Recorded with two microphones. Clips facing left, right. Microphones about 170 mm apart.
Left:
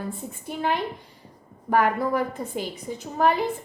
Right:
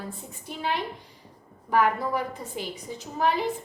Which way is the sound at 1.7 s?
50° left (ahead or behind).